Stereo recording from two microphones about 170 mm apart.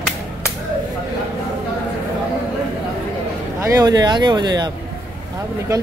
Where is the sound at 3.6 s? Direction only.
20° right (ahead or behind).